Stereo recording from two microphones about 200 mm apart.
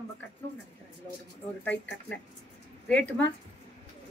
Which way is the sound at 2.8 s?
5° left (ahead or behind).